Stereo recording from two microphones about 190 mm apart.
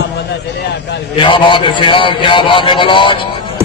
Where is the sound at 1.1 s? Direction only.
25° left (ahead or behind).